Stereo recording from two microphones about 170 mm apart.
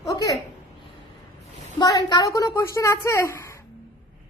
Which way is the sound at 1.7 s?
20° left (ahead or behind).